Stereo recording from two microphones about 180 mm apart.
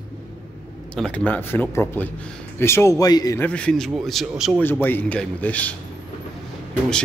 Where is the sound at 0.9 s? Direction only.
5° left (ahead or behind).